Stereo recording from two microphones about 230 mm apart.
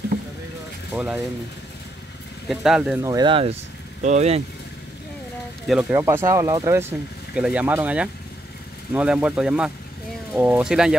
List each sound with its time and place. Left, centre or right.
0.9 s speech: centre
2.4 s speech: centre
3.0 s speech: centre
5.7 s speech: centre